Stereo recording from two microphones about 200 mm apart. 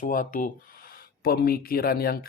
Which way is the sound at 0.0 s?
40° left (ahead or behind).